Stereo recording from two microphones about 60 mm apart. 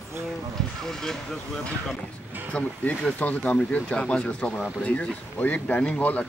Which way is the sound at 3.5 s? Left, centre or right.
Centre.